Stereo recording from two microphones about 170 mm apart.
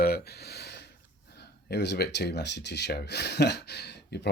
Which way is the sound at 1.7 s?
80° left.